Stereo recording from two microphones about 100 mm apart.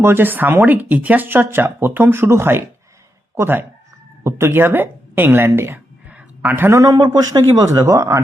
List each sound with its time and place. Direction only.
0.0 s speech: 20° right (ahead or behind)
6.1 s a sound: 15° right (ahead or behind)
6.7 s speech: 35° right (ahead or behind)